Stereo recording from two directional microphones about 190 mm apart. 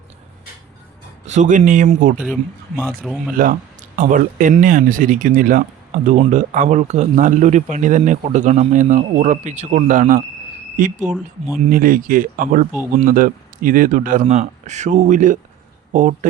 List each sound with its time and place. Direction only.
1.3 s a man's voice: 40° right (ahead or behind)
3.0 s speech: 5° right (ahead or behind)
3.3 s a man's voice: 45° right (ahead or behind)